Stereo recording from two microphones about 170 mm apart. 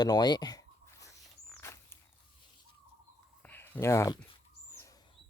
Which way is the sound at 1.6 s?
15° left (ahead or behind).